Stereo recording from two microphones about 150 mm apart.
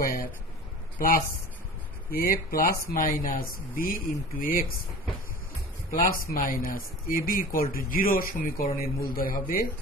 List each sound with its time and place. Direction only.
0.9 s a man's voice: 70° left (ahead or behind)
5.9 s speech: 70° left (ahead or behind)